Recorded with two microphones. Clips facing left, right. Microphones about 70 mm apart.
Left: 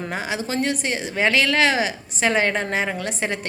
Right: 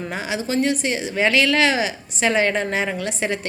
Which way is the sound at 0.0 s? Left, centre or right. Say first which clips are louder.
Right 1 dB; left.